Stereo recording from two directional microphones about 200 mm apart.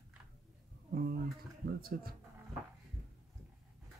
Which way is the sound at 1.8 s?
50° right (ahead or behind).